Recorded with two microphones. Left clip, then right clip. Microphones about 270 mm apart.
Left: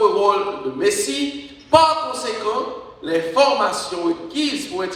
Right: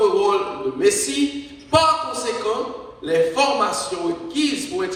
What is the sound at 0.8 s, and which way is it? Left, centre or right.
A man's voice, left.